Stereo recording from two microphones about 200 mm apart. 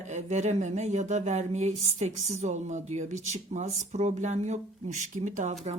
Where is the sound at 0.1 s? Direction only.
35° right (ahead or behind).